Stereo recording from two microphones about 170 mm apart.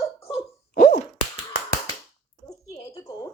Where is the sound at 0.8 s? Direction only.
50° left (ahead or behind).